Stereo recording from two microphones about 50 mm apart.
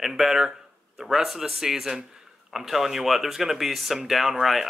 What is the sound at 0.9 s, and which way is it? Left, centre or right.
Speech, centre.